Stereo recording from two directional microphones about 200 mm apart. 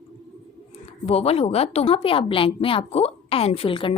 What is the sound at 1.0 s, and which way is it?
A woman's voice, 30° left (ahead or behind).